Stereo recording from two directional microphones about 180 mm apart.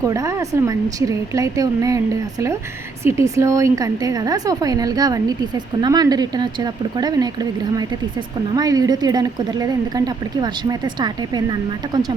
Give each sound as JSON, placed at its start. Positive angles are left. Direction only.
{"t": 0.0, "sound": "speech", "side_deg": -15}
{"t": 3.0, "sound": "a woman's voice", "side_deg": -15}
{"t": 8.5, "sound": "a woman's voice", "side_deg": -20}